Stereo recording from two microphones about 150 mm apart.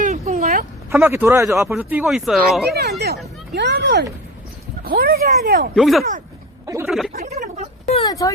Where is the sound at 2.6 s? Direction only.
90° right; by 5.7 s 75° right (ahead or behind).